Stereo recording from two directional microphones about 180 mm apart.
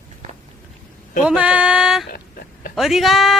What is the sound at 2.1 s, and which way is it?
Speech, 50° left (ahead or behind).